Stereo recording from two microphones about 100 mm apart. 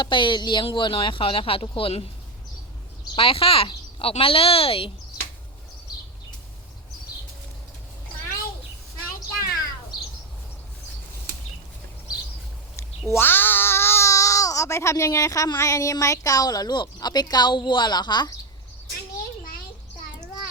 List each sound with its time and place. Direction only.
0.0 s speech: 55° left (ahead or behind); by 2.0 s 70° left (ahead or behind)
3.2 s speech: 65° left (ahead or behind)
13.1 s babbling: 20° left (ahead or behind)
15.5 s speech: 30° left (ahead or behind)